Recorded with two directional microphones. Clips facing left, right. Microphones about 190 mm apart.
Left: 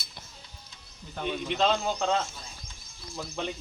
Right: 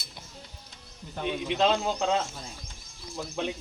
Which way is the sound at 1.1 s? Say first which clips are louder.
Right 1 dB; 10° right (ahead or behind).